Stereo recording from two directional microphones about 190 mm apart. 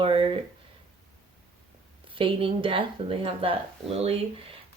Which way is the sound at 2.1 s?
25° right (ahead or behind).